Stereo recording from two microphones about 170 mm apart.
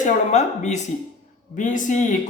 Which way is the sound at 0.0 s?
45° left (ahead or behind).